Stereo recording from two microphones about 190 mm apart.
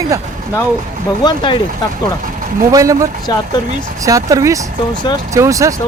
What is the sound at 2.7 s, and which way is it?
Speech, 15° right (ahead or behind).